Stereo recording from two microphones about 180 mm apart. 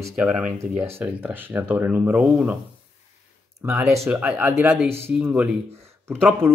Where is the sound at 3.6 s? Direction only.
10° right (ahead or behind).